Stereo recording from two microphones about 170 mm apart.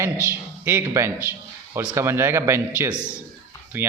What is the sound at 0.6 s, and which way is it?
A man's voice, 15° right (ahead or behind).